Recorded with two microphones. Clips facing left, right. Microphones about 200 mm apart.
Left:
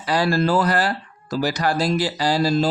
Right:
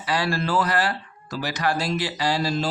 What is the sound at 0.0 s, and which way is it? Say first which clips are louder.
Speech: left 5 dB; 40° left (ahead or behind).